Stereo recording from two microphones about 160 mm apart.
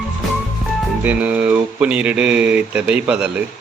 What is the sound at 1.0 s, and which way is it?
A woman's voice, 10° right (ahead or behind).